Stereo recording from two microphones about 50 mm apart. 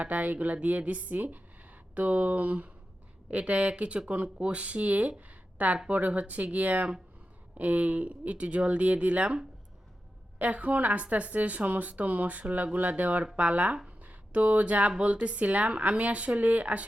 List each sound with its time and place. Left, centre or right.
0.0 s a woman's voice: right